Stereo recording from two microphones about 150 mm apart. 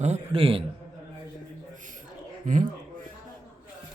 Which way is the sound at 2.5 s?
60° right (ahead or behind).